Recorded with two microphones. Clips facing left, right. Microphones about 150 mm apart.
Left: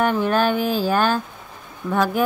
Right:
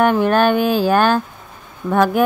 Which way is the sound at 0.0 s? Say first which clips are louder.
Right 5 dB; 60° right (ahead or behind).